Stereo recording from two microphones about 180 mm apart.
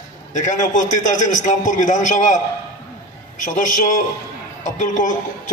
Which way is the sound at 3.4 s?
45° left (ahead or behind).